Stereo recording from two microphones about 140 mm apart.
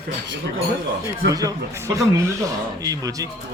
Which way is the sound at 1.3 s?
25° right (ahead or behind).